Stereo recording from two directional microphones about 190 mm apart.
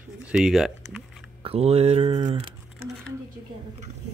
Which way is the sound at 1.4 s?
30° right (ahead or behind).